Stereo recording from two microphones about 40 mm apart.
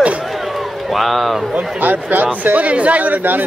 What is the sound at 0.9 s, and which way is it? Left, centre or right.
Speech, centre.